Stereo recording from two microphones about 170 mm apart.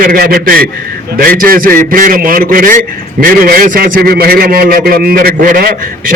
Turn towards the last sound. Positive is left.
turn(degrees=-60)  # may be behind; listen again after turning